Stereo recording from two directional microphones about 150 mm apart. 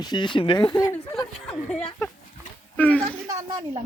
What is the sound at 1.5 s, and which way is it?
Speech, 5° left (ahead or behind).